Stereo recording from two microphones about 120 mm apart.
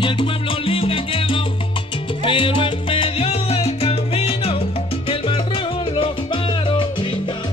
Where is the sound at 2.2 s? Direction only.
45° left (ahead or behind).